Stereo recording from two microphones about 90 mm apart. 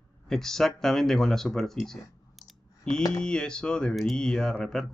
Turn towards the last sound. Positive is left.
turn(degrees=5)  # may be behind; listen again after turning